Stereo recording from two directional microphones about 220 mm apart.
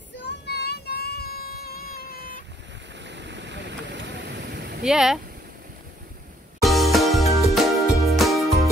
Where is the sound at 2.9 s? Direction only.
55° right (ahead or behind).